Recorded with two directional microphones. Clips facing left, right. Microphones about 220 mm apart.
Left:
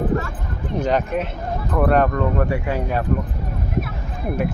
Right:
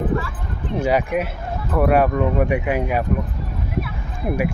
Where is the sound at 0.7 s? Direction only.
10° right (ahead or behind).